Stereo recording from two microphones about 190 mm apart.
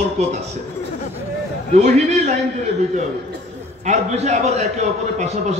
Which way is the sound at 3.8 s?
35° right (ahead or behind).